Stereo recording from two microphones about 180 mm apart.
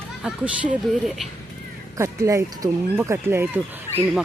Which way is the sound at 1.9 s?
15° right (ahead or behind).